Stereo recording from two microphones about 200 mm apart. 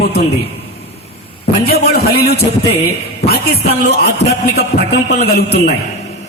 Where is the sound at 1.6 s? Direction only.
50° left (ahead or behind).